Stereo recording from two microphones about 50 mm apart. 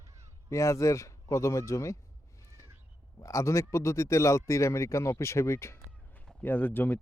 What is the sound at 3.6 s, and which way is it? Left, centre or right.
Speech, left.